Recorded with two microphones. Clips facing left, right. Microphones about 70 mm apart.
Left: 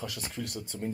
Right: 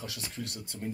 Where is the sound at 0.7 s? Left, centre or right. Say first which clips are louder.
Left 2 dB; left.